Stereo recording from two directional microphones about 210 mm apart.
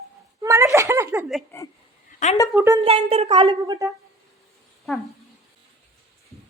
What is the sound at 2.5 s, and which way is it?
Speech, 10° right (ahead or behind).